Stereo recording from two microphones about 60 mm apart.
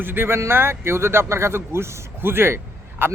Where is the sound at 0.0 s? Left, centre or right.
Right.